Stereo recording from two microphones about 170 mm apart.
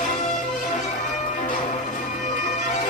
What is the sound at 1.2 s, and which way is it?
Bagpipes, 50° left (ahead or behind).